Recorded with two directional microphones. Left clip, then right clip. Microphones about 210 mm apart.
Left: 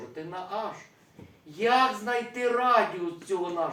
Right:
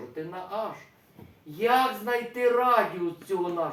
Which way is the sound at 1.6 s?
10° right (ahead or behind).